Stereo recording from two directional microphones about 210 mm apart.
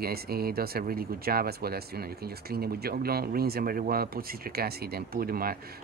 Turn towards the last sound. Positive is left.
turn(degrees=-45)  # may be behind; listen again after turning